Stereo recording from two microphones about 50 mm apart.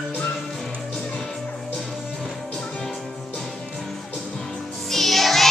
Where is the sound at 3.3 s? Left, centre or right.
Centre.